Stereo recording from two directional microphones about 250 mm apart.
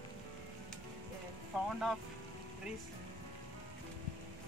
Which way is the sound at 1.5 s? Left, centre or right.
Centre.